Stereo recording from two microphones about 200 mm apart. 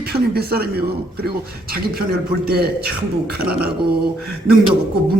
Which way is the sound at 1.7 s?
50° right (ahead or behind).